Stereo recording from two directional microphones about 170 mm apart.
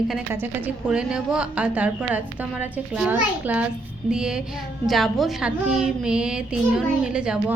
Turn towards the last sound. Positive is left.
turn(degrees=-5)  # may be behind; listen again after turning